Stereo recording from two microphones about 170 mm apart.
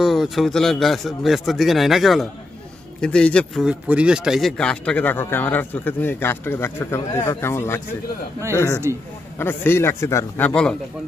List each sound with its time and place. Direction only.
0.0 s speech: centre (ahead or behind)
3.6 s speech: 5° right (ahead or behind); by 7.8 s 15° left (ahead or behind)
8.9 s a man's voice: 15° right (ahead or behind)
9.4 s speech: 15° left (ahead or behind)